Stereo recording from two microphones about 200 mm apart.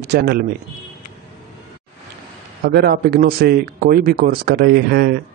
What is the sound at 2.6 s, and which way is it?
A man's voice, 50° right (ahead or behind).